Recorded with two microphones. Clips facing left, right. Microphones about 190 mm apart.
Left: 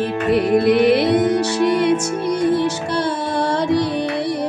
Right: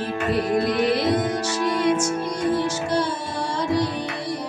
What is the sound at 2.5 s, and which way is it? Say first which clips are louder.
Music: left 3 dB; 65° left (ahead or behind).